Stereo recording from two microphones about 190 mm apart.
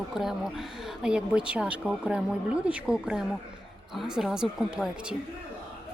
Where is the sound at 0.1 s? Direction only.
Centre (ahead or behind).